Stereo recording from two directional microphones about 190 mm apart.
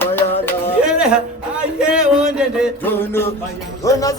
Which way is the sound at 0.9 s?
5° right (ahead or behind).